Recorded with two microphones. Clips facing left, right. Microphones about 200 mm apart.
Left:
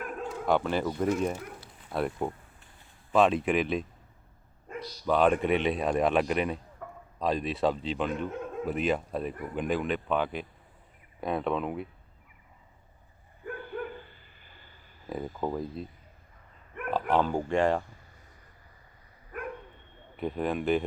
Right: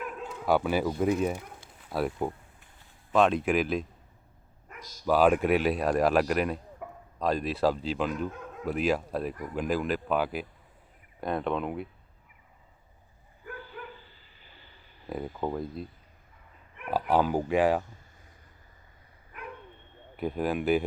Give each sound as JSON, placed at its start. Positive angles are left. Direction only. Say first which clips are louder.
{"t": 0.0, "sound": "bow-wow", "louder": "left 2 dB", "side_deg": 50}
{"t": 0.4, "sound": "speech", "louder": "right 2 dB", "side_deg": -5}
{"t": 4.7, "sound": "dog", "louder": "left 10 dB", "side_deg": 30}
{"t": 5.0, "sound": "speech", "louder": "right 2 dB", "side_deg": -5}
{"t": 6.8, "sound": "a sound", "louder": "right 2 dB", "side_deg": -15}
{"t": 7.2, "sound": "speech", "louder": "right 1 dB", "side_deg": 0}
{"t": 13.6, "sound": "dog", "louder": "left 7 dB", "side_deg": 55}
{"t": 15.4, "sound": "speech", "louder": "even", "side_deg": 0}
{"t": 16.9, "sound": "speech", "louder": "right 1 dB", "side_deg": -10}
{"t": 19.3, "sound": "bow-wow", "louder": "left 7 dB", "side_deg": 50}
{"t": 20.1, "sound": "speech", "louder": "right 1 dB", "side_deg": -5}